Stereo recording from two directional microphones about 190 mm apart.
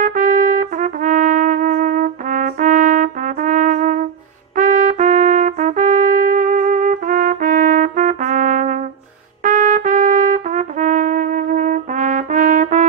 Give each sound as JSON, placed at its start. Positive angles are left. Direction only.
{"t": 0.0, "sound": "trumpet", "side_deg": -45}